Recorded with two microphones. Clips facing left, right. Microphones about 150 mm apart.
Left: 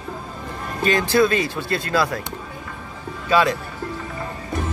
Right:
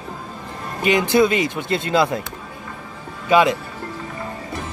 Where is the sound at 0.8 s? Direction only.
20° right (ahead or behind).